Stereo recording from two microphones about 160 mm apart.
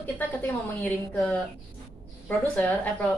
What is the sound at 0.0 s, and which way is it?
A woman's voice, 10° left (ahead or behind).